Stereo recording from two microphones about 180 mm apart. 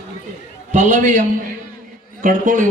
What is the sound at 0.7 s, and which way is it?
Speech, 45° right (ahead or behind).